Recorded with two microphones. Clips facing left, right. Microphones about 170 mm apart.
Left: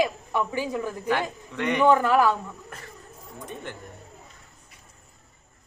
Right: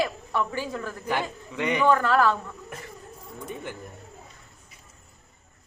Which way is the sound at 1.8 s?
15° left (ahead or behind).